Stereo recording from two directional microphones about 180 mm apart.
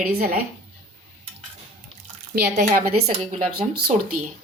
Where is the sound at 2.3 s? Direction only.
50° right (ahead or behind).